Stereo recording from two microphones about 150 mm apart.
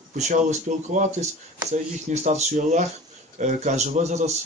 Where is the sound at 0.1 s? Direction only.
55° right (ahead or behind).